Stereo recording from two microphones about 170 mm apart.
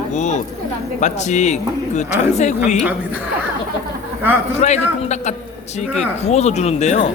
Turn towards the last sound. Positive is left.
turn(degrees=40)  # may be behind; listen again after turning